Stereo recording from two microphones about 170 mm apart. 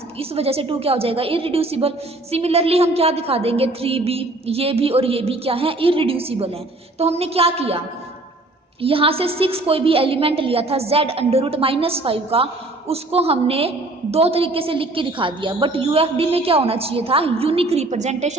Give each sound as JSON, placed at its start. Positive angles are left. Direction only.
{"t": 0.2, "sound": "a woman's voice", "side_deg": -35}
{"t": 8.8, "sound": "a woman's voice", "side_deg": -35}